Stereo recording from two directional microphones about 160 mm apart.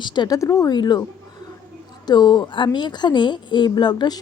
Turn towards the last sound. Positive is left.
turn(degrees=25)  # may be behind; listen again after turning